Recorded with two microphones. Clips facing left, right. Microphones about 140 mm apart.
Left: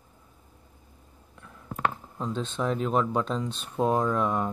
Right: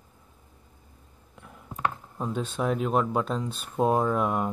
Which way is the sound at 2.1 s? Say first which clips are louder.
Right 1 dB; 10° right (ahead or behind).